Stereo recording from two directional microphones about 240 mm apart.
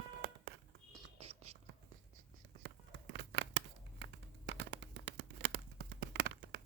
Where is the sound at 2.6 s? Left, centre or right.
Right.